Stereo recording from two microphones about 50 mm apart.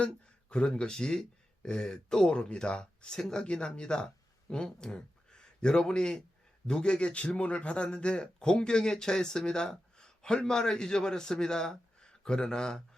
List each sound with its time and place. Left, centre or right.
0.5 s a man's voice: centre